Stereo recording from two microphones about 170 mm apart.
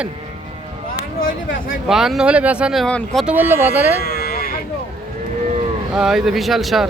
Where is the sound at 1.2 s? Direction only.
55° left (ahead or behind).